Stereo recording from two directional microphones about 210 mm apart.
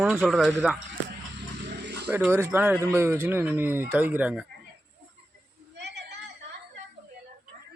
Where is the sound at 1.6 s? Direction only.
50° right (ahead or behind).